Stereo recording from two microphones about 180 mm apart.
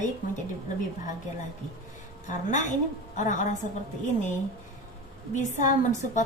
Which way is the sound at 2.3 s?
45° left (ahead or behind).